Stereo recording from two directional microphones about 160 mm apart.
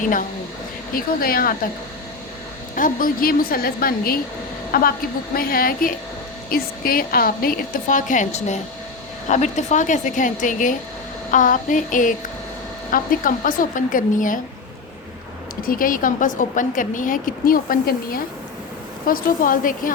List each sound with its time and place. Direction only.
0.9 s a woman's voice: 65° left (ahead or behind)
2.7 s a woman's voice: 60° left (ahead or behind)
15.6 s a woman's voice: 60° left (ahead or behind)